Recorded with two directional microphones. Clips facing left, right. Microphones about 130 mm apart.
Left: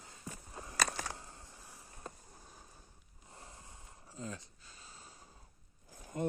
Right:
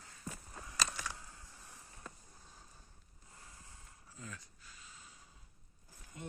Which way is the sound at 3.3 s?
25° left (ahead or behind).